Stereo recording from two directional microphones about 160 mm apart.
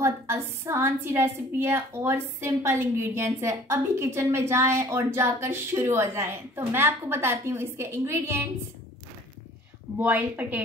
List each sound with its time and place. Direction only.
0.0 s a woman's voice: 15° right (ahead or behind)
9.9 s a woman's voice: 10° right (ahead or behind)